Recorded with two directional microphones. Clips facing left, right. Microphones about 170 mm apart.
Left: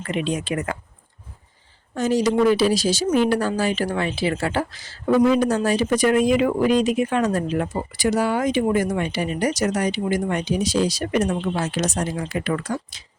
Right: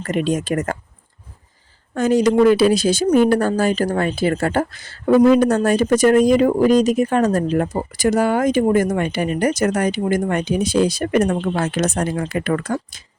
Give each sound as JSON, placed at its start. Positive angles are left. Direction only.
{"t": 0.0, "sound": "speech", "side_deg": -45}
{"t": 2.0, "sound": "speech", "side_deg": -55}